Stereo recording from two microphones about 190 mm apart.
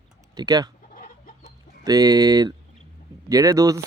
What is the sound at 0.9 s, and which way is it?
Chicken, 45° left (ahead or behind).